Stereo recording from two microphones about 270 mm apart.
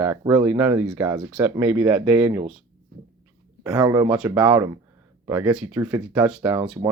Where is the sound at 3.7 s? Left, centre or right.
Centre.